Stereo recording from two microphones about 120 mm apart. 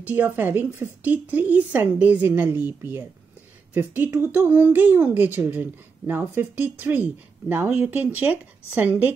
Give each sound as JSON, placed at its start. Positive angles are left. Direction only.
{"t": 0.0, "sound": "speech", "side_deg": -15}